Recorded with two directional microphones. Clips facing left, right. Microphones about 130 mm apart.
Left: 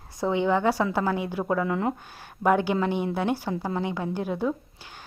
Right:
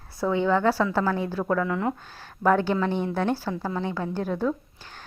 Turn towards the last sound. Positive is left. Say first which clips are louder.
# right 1 dB
turn(degrees=15)  # may be behind; listen again after turning